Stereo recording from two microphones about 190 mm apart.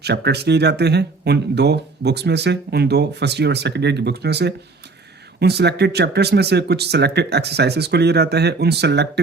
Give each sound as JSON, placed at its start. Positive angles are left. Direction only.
{"t": 0.0, "sound": "speech", "side_deg": -60}